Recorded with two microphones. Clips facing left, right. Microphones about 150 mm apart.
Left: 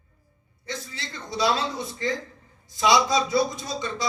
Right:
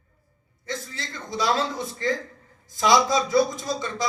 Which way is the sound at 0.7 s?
45° right (ahead or behind).